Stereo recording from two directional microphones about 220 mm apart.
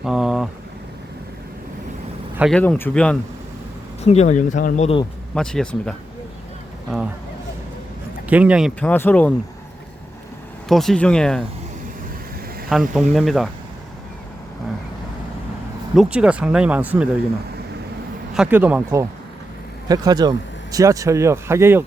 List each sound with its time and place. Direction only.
0.0 s vehicle: centre (ahead or behind)
2.4 s speech: 5° left (ahead or behind)
4.0 s speech: 30° left (ahead or behind)
5.3 s speech: 5° left (ahead or behind)
8.3 s speech: 5° right (ahead or behind)
10.7 s speech: centre (ahead or behind)
12.6 s speech: centre (ahead or behind)
16.0 s speech: 5° right (ahead or behind)
18.3 s speech: 5° right (ahead or behind)